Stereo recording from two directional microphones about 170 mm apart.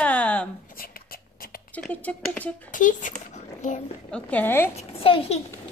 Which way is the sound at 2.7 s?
50° left (ahead or behind).